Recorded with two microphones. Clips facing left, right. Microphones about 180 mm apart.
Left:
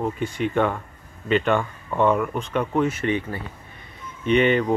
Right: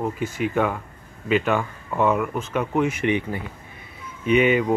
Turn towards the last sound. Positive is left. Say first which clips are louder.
# even
turn(degrees=-5)  # may be behind; listen again after turning